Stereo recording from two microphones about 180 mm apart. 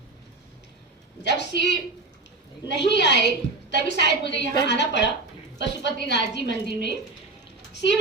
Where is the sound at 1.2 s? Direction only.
75° left (ahead or behind).